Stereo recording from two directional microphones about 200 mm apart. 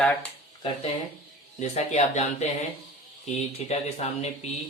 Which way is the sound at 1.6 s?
35° left (ahead or behind).